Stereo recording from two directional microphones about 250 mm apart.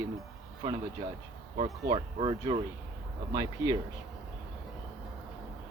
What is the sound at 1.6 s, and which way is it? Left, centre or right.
Speech, right.